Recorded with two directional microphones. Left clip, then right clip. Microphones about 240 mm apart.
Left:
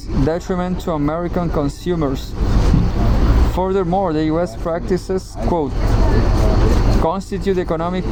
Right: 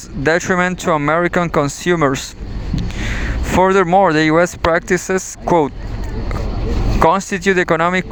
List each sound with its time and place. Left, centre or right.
0.3 s speech: right
3.5 s speech: right
7.0 s speech: right